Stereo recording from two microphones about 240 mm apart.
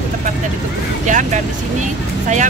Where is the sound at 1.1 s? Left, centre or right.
Right.